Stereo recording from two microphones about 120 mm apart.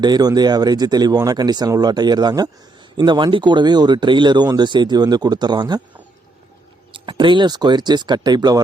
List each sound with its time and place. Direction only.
0.0 s speech: 35° right (ahead or behind)
6.9 s speech: 45° right (ahead or behind)